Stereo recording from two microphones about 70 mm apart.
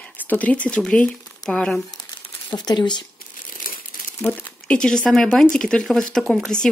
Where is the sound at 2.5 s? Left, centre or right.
Left.